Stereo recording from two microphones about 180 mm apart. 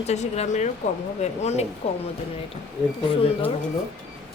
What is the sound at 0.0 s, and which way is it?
Speech, 35° left (ahead or behind).